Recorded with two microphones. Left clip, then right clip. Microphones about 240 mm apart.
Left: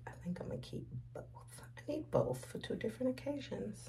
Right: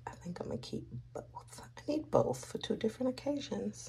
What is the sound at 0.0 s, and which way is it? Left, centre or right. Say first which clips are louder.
Speech: right 4 dB; centre.